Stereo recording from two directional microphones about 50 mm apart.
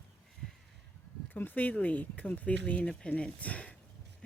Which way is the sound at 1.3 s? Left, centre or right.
Left.